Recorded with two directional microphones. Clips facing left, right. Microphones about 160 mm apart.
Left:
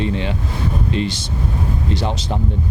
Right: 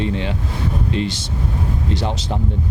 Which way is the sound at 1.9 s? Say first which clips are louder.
Left 1 dB; 20° left (ahead or behind).